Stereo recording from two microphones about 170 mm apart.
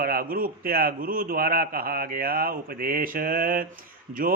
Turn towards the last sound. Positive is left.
turn(degrees=-55)  # may be behind; listen again after turning